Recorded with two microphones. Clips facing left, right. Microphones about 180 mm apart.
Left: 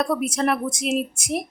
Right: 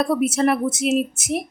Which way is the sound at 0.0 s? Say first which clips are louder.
Right 4 dB; centre (ahead or behind).